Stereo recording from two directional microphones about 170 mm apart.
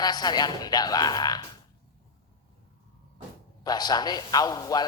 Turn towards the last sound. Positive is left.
turn(degrees=20)  # may be behind; listen again after turning